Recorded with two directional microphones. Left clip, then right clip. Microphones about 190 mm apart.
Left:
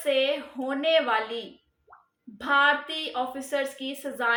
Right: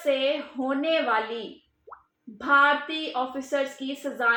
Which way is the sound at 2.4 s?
15° left (ahead or behind).